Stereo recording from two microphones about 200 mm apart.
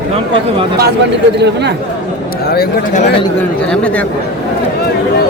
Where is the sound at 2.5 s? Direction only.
50° left (ahead or behind).